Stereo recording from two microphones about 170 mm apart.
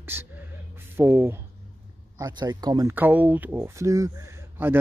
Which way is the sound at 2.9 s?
10° right (ahead or behind).